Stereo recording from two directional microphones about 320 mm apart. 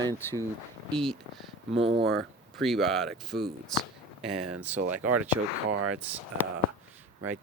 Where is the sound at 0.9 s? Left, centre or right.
Centre.